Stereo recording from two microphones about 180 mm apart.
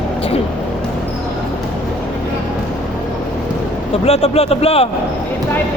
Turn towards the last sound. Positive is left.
turn(degrees=35)  # may be behind; listen again after turning